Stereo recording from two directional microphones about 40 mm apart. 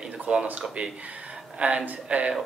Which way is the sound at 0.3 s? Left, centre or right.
Right.